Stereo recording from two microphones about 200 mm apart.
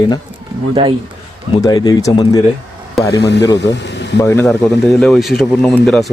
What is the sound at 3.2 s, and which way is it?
Speech, 60° left (ahead or behind).